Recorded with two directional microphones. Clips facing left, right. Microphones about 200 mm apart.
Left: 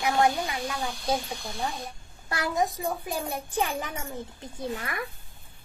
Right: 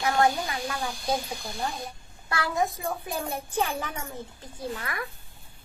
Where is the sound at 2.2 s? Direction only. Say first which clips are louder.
Even; 15° left (ahead or behind).